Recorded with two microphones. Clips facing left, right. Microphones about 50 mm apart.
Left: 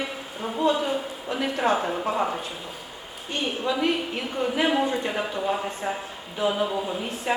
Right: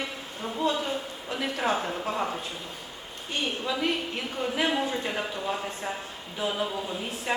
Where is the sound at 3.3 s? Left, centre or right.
Centre.